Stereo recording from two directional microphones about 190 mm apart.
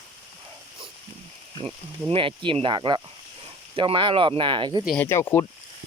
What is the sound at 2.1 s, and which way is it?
Speech, 30° right (ahead or behind).